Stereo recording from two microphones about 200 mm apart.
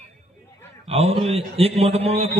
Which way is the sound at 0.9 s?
30° right (ahead or behind).